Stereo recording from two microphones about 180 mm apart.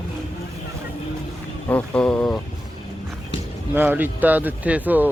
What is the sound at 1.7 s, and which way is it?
Vehicle, 10° left (ahead or behind).